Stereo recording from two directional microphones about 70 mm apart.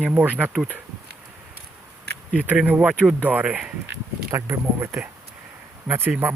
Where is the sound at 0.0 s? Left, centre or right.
Right.